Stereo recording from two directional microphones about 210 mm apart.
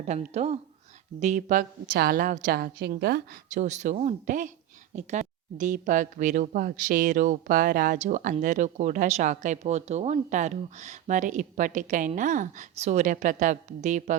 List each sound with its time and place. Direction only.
0.0 s a woman's voice: 30° right (ahead or behind); by 3.2 s 50° right (ahead or behind)
3.5 s speech: 35° right (ahead or behind)